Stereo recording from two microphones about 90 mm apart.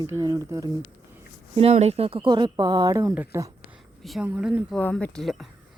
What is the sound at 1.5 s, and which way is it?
Speech, 90° right.